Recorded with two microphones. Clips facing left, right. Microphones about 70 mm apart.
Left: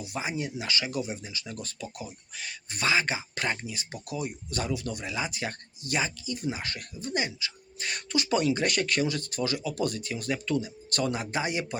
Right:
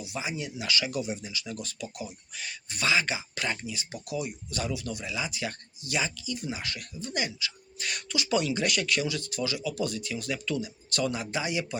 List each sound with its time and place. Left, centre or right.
0.0 s speech: left
10.8 s speech: left